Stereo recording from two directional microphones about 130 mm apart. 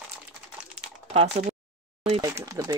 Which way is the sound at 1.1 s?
50° right (ahead or behind).